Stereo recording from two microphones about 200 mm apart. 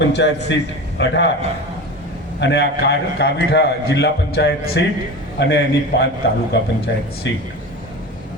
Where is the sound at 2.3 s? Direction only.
60° left (ahead or behind).